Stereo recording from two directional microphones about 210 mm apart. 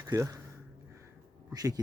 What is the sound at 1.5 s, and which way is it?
Speech, 15° right (ahead or behind).